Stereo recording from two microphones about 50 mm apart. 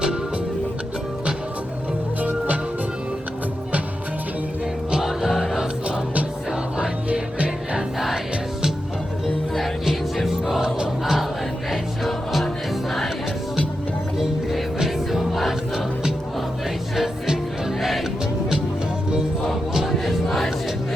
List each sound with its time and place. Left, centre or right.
4.9 s music: centre
6.7 s music: right
7.9 s music: centre
9.2 s music: centre
14.2 s music: centre
19.9 s music: centre